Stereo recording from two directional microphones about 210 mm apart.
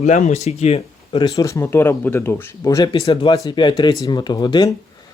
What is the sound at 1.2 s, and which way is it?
Speech, 15° left (ahead or behind).